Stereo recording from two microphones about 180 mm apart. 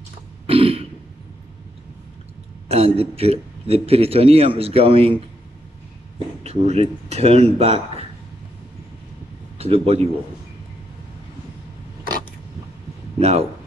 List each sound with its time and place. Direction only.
0.5 s throat clearing: 30° right (ahead or behind)
2.7 s a man's voice: 35° right (ahead or behind)
6.1 s speech: 35° right (ahead or behind)
9.6 s a man's voice: 35° right (ahead or behind)
13.2 s a man's voice: 35° right (ahead or behind)